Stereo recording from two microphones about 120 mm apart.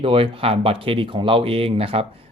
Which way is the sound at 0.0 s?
50° right (ahead or behind).